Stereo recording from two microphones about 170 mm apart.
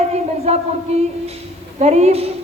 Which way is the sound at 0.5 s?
40° right (ahead or behind).